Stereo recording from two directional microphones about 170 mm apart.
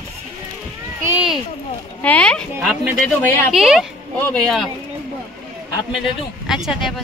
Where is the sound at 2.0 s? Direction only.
5° left (ahead or behind).